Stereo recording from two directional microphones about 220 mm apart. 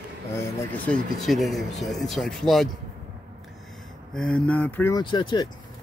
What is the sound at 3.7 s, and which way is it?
Speech, centre (ahead or behind).